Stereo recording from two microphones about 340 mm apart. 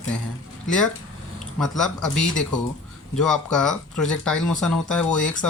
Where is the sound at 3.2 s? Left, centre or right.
Centre.